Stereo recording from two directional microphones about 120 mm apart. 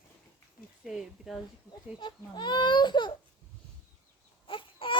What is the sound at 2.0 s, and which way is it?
Speech, 40° left (ahead or behind).